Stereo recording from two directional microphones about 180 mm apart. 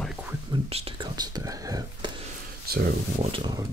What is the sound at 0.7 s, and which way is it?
Speech, 25° right (ahead or behind).